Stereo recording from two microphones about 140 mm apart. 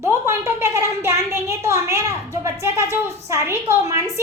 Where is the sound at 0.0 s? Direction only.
15° right (ahead or behind).